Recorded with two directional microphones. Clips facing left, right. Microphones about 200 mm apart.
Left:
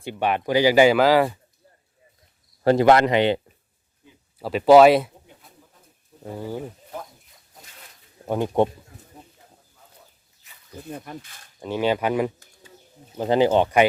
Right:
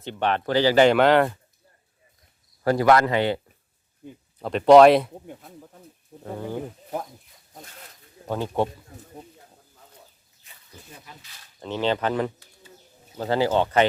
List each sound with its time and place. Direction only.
0.0 s speech: 10° left (ahead or behind)
2.6 s a man's voice: 25° left (ahead or behind)
4.4 s speech: 5° left (ahead or behind)
5.2 s speech: 50° right (ahead or behind)
6.1 s bird: 45° right (ahead or behind)
8.3 s speech: 15° left (ahead or behind)
10.8 s speech: 55° left (ahead or behind)
11.6 s speech: 10° left (ahead or behind)